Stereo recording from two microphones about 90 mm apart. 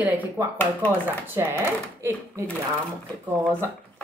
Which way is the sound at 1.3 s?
25° right (ahead or behind).